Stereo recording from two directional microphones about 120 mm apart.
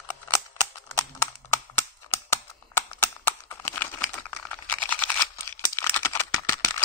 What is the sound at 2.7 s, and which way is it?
Computer keyboard, 20° left (ahead or behind).